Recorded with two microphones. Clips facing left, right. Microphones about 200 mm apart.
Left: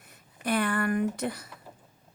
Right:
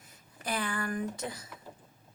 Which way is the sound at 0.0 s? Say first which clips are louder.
Left 7 dB; 60° left (ahead or behind).